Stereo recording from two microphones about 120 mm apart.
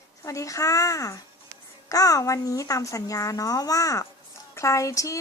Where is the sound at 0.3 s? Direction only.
25° left (ahead or behind).